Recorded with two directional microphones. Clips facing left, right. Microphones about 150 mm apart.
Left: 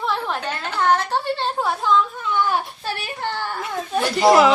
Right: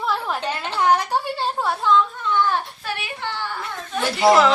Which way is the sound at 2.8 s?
35° left (ahead or behind).